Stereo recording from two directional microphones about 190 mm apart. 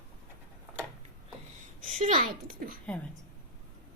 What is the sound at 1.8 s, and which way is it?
Speech, 40° right (ahead or behind).